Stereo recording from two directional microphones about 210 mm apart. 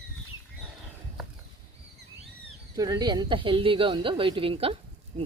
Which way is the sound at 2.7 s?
20° right (ahead or behind).